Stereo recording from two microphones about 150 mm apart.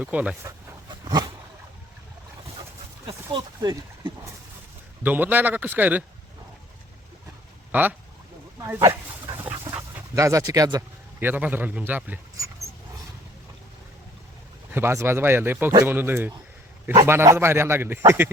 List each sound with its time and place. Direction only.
0.0 s a man's voice: 10° right (ahead or behind)
1.0 s a sound: 25° right (ahead or behind)
3.3 s speech: 30° right (ahead or behind)
5.0 s a man's voice: 10° right (ahead or behind)
7.7 s a man's voice: 10° right (ahead or behind)
9.4 s dog: 20° right (ahead or behind)
11.2 s a man's voice: 10° right (ahead or behind)
14.7 s a man's voice: 15° right (ahead or behind)